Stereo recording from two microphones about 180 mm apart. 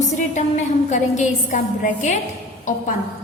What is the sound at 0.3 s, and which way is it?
A woman's voice, 40° left (ahead or behind).